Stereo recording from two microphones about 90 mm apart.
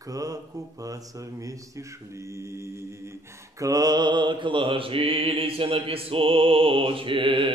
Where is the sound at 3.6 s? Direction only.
45° right (ahead or behind).